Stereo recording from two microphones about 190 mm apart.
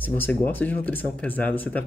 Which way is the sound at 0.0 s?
10° left (ahead or behind).